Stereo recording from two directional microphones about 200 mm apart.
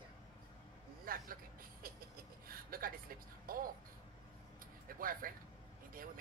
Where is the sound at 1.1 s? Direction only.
45° right (ahead or behind).